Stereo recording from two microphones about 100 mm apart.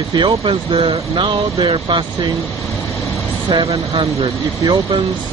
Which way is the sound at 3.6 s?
70° right (ahead or behind).